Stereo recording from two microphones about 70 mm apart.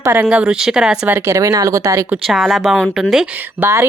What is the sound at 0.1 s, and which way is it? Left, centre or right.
Speech, centre.